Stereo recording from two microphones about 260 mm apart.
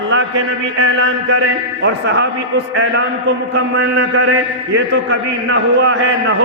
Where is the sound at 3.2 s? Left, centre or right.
Right.